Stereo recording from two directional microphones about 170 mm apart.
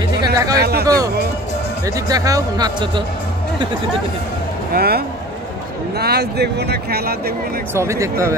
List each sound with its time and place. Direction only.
0.2 s a sound: 20° right (ahead or behind)
0.6 s speech: 70° right (ahead or behind)
0.8 s speech: 20° right (ahead or behind)
4.7 s speech: 65° right (ahead or behind)
7.7 s speech: 15° right (ahead or behind)